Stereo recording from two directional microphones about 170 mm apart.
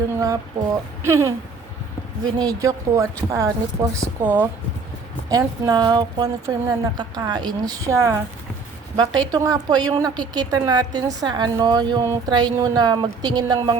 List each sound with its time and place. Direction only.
0.1 s a sound: 20° right (ahead or behind)
1.0 s a woman's voice: 15° right (ahead or behind)
5.3 s a woman's voice: 25° right (ahead or behind)